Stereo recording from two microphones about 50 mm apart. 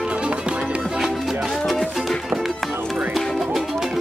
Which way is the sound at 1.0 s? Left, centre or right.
Centre.